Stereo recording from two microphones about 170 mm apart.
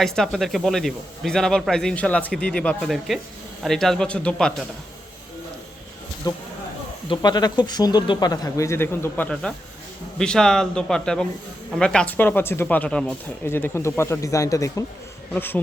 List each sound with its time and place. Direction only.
0.0 s speech: centre (ahead or behind)
6.3 s speech: 20° left (ahead or behind)